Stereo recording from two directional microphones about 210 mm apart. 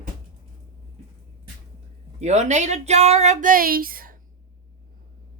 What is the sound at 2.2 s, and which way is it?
Speech, 35° right (ahead or behind).